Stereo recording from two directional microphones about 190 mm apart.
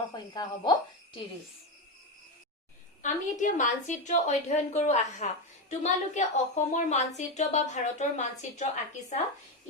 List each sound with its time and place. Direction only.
0.1 s speech: 20° left (ahead or behind)
3.0 s a woman's voice: 40° left (ahead or behind)